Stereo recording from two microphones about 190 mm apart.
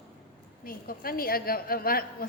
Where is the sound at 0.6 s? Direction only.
50° left (ahead or behind).